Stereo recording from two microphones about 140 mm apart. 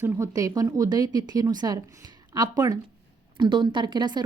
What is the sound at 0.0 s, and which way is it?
A woman's voice, 20° right (ahead or behind).